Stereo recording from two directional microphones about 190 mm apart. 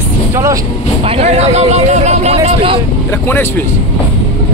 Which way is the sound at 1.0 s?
35° right (ahead or behind).